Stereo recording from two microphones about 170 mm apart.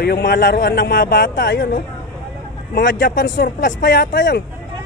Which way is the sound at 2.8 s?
90° left.